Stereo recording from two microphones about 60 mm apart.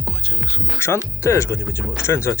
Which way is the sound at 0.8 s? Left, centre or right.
Left.